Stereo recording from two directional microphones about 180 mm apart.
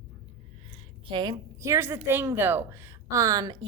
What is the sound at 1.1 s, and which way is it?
A woman's voice, 25° right (ahead or behind).